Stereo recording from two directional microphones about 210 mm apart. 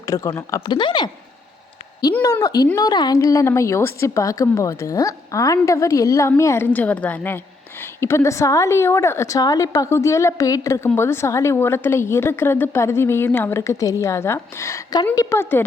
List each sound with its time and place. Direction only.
0.1 s speech: 15° left (ahead or behind)
2.2 s a woman's voice: 20° left (ahead or behind)